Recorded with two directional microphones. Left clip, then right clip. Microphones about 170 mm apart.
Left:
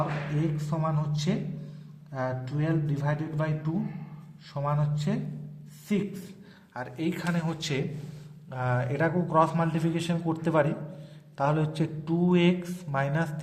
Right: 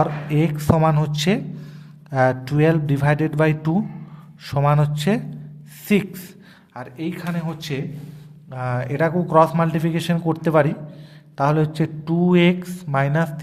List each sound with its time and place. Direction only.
0.3 s speech: 45° right (ahead or behind)
6.7 s a man's voice: 15° right (ahead or behind)